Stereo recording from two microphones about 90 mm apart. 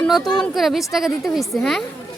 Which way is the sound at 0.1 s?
5° left (ahead or behind).